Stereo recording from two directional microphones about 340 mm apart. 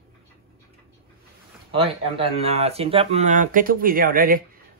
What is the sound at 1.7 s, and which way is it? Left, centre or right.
Speech, centre.